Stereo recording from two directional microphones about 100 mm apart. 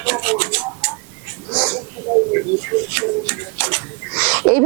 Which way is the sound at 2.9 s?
15° right (ahead or behind).